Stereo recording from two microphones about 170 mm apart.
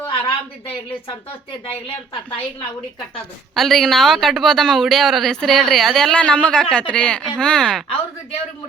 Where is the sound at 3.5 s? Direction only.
Centre (ahead or behind).